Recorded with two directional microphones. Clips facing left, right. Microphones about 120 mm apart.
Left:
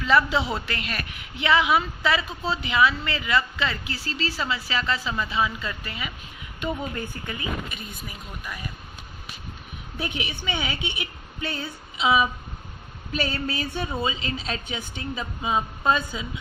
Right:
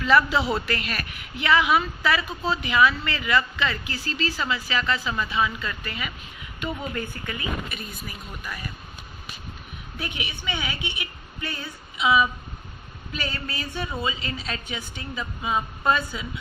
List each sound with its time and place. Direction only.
0.0 s a woman's voice: 25° left (ahead or behind)
10.0 s a woman's voice: 30° left (ahead or behind)